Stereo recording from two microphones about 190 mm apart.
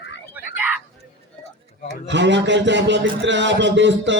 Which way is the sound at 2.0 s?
70° right (ahead or behind).